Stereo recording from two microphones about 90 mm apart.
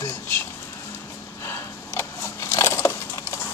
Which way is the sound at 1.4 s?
30° left (ahead or behind).